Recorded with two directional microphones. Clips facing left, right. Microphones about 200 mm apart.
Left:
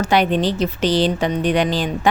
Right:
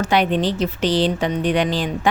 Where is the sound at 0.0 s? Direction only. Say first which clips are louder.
Left 1 dB; 40° left (ahead or behind).